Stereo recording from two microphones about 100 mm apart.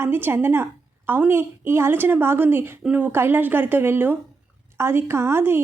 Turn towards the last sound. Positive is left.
turn(degrees=-25)  # may be behind; listen again after turning